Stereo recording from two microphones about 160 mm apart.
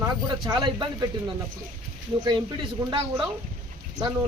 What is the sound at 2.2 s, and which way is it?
Speech, 30° right (ahead or behind).